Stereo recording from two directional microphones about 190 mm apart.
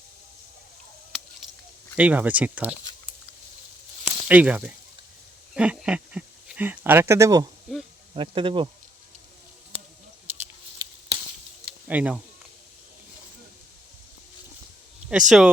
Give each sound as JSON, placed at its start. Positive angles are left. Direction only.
{"t": 2.0, "sound": "speech", "side_deg": -10}
{"t": 4.0, "sound": "a sound", "side_deg": -5}
{"t": 5.5, "sound": "speech", "side_deg": -5}
{"t": 11.6, "sound": "mechanisms", "side_deg": -5}
{"t": 15.1, "sound": "speech", "side_deg": 0}